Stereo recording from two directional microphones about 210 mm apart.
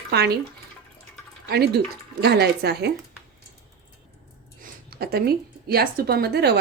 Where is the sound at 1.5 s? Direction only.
50° right (ahead or behind).